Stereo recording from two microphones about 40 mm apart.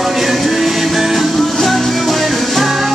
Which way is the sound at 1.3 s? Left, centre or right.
Centre.